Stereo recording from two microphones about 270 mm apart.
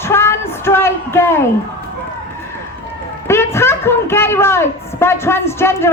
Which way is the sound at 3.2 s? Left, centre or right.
Centre.